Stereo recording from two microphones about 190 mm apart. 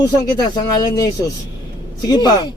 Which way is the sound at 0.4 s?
20° left (ahead or behind).